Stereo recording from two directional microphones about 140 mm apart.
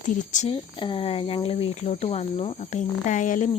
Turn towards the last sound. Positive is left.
turn(degrees=65)  # may be behind; listen again after turning